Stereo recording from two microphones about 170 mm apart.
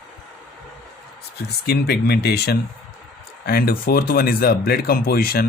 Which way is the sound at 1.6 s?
70° left (ahead or behind).